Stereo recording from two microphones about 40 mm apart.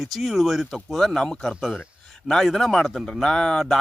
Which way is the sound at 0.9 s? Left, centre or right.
Centre.